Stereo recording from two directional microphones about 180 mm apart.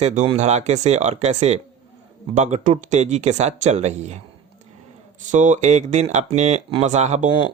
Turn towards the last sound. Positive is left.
turn(degrees=-35)  # may be behind; listen again after turning